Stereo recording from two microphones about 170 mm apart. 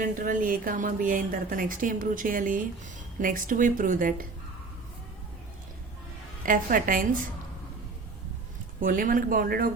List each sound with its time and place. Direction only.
0.0 s a woman's voice: 50° right (ahead or behind)
6.4 s speech: 55° right (ahead or behind)
8.8 s speech: 55° right (ahead or behind)